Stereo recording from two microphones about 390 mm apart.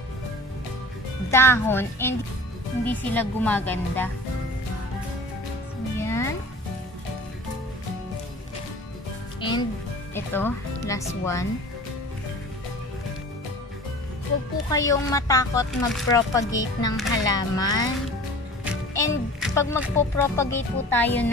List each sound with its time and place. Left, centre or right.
1.3 s speech: centre
5.9 s music: centre
9.4 s music: centre
10.1 s speech: centre
14.7 s speech: centre
18.9 s speech: centre